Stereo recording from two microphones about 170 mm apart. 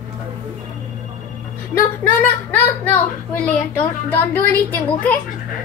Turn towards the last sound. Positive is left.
turn(degrees=10)  # may be behind; listen again after turning